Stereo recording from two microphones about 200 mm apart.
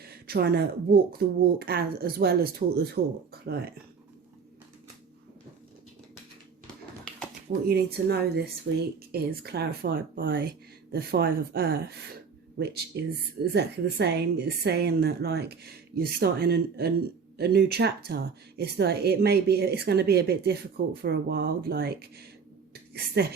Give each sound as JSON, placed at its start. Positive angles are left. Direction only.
{"t": 0.0, "sound": "a woman's voice", "side_deg": -50}
{"t": 7.7, "sound": "a woman's voice", "side_deg": -50}
{"t": 23.2, "sound": "a woman's voice", "side_deg": -55}